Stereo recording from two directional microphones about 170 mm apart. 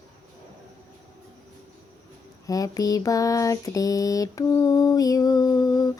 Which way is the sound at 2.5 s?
20° left (ahead or behind).